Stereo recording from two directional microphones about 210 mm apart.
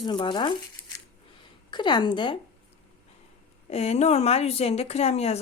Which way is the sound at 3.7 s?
30° left (ahead or behind).